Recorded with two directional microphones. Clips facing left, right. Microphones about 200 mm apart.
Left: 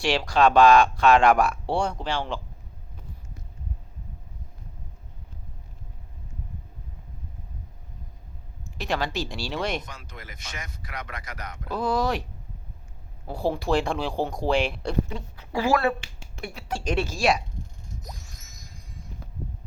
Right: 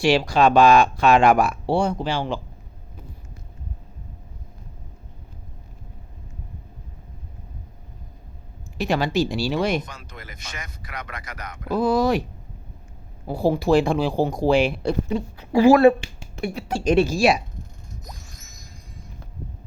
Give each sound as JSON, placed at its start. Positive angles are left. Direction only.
{"t": 0.0, "sound": "speech", "side_deg": -5}
{"t": 8.8, "sound": "speech", "side_deg": -10}
{"t": 9.8, "sound": "speech", "side_deg": -55}
{"t": 11.7, "sound": "speech", "side_deg": -10}
{"t": 13.2, "sound": "speech", "side_deg": -10}
{"t": 15.1, "sound": "speech", "side_deg": -15}
{"t": 16.0, "sound": "a sound", "side_deg": -15}
{"t": 16.6, "sound": "speech", "side_deg": -15}